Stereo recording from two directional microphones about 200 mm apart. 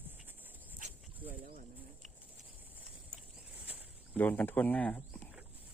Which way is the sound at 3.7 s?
10° right (ahead or behind).